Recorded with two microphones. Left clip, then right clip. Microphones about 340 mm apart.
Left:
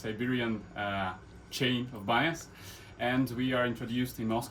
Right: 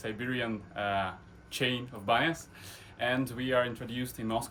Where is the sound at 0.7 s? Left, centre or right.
Centre.